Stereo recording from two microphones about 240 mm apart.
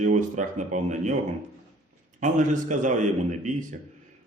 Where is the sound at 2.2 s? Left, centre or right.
Right.